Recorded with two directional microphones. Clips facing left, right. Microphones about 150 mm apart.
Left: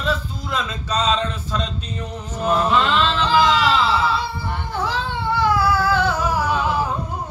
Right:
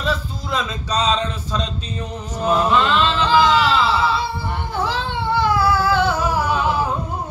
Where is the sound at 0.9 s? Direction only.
15° right (ahead or behind).